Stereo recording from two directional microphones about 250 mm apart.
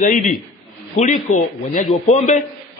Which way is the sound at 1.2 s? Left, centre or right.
Left.